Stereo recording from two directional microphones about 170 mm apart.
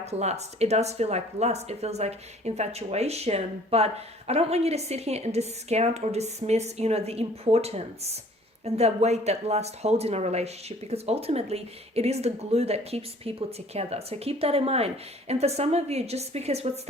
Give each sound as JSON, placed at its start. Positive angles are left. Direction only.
{"t": 0.0, "sound": "speech", "side_deg": -40}